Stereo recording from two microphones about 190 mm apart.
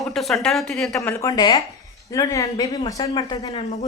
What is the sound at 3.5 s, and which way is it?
Speech, 35° left (ahead or behind).